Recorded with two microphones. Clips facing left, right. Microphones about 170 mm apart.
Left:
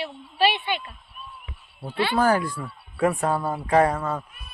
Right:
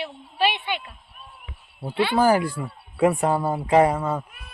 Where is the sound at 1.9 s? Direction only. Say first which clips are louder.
Right 2 dB; 5° right (ahead or behind).